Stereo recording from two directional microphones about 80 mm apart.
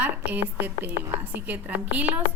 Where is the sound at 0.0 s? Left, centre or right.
Centre.